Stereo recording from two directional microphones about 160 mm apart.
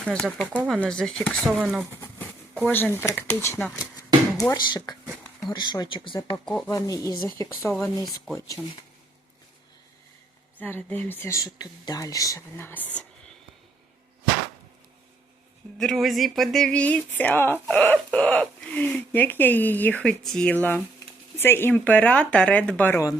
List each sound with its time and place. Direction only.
0.0 s speech: centre (ahead or behind)
2.6 s speech: 10° left (ahead or behind)
4.4 s speech: 25° left (ahead or behind)
6.4 s speech: 10° left (ahead or behind)
6.7 s speech: 20° left (ahead or behind)
7.1 s speech: 30° right (ahead or behind)
7.3 s speech: 20° left (ahead or behind)
10.6 s speech: 10° left (ahead or behind)
15.8 s speech: centre (ahead or behind)